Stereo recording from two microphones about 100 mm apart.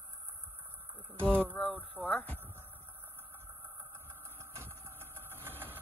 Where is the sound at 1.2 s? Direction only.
10° left (ahead or behind).